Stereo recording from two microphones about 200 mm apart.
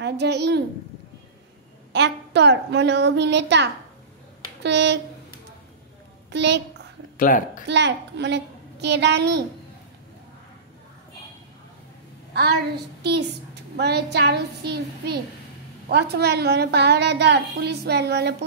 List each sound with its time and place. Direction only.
0.0 s a child's voice: 55° right (ahead or behind)
1.9 s a woman's voice: 60° right (ahead or behind)
6.3 s a woman's voice: 60° right (ahead or behind)
7.2 s speech: 40° left (ahead or behind)
7.6 s a woman's voice: 60° right (ahead or behind)
12.4 s a woman's voice: 55° right (ahead or behind)